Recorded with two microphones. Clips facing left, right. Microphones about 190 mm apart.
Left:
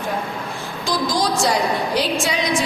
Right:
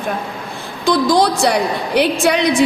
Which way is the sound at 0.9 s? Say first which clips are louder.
Right 7 dB; 65° right (ahead or behind).